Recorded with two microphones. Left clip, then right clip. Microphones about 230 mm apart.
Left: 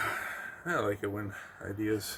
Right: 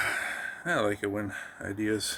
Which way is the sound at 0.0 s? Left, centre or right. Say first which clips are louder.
Right 4 dB; right.